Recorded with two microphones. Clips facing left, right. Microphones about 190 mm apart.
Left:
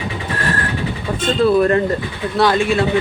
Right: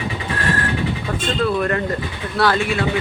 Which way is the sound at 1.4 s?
30° left (ahead or behind).